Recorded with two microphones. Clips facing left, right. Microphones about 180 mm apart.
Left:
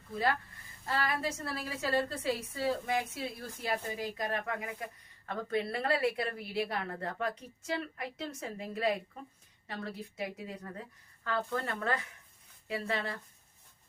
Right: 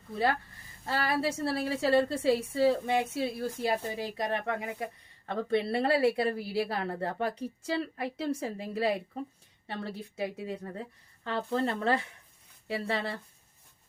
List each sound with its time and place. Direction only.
0.1 s a woman's voice: 30° right (ahead or behind)